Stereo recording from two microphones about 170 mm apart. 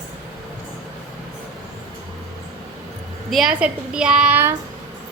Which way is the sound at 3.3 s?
5° right (ahead or behind).